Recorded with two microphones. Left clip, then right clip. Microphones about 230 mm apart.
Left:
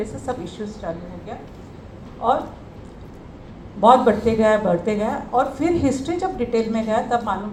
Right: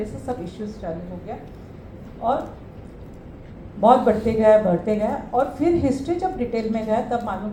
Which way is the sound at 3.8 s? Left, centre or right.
Left.